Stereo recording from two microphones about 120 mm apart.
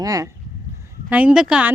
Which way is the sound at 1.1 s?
10° right (ahead or behind).